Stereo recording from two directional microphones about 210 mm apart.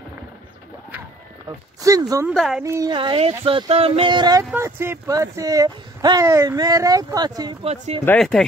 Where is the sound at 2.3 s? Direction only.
Centre (ahead or behind).